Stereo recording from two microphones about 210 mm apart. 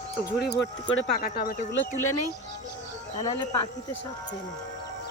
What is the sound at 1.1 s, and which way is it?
Speech, 45° left (ahead or behind).